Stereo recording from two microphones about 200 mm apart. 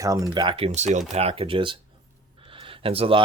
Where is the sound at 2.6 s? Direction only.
25° right (ahead or behind).